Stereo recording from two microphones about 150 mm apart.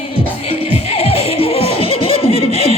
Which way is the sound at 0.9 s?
40° left (ahead or behind).